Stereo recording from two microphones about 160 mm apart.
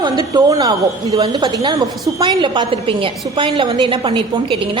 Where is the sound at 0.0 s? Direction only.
25° right (ahead or behind).